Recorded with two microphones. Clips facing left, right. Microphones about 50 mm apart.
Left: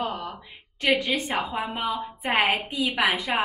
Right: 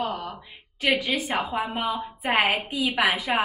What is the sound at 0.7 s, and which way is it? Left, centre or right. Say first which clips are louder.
A woman's voice: left 1 dB; centre.